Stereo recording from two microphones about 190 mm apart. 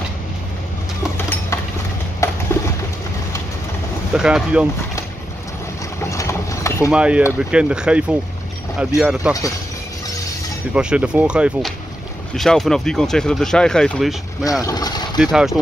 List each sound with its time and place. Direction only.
1.1 s a sound: 10° left (ahead or behind)
4.1 s speech: 5° right (ahead or behind)
6.0 s mechanisms: 15° left (ahead or behind)
6.9 s speech: 5° right (ahead or behind)
10.7 s speech: 5° right (ahead or behind)
14.6 s speech: 20° left (ahead or behind)
15.1 s speech: centre (ahead or behind)